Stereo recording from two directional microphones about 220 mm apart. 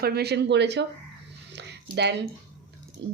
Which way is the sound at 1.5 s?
50° right (ahead or behind).